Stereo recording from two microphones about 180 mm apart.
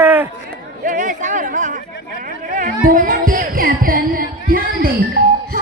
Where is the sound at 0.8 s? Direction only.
45° right (ahead or behind).